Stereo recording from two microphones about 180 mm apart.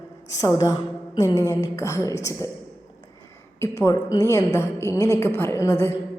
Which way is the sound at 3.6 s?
15° left (ahead or behind).